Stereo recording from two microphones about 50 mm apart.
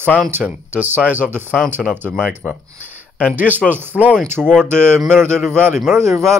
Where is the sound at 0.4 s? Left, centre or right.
Right.